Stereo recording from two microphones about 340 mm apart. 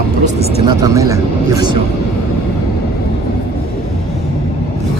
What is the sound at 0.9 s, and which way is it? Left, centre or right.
Speech, centre.